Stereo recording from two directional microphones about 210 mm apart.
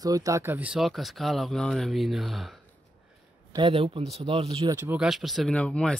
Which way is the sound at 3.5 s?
25° right (ahead or behind).